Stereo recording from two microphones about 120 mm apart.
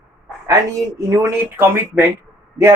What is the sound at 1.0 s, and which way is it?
Speech, 25° right (ahead or behind).